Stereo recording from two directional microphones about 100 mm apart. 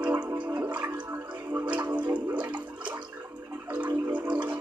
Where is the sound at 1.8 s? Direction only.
50° right (ahead or behind).